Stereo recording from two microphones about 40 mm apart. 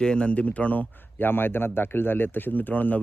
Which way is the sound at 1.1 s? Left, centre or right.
Left.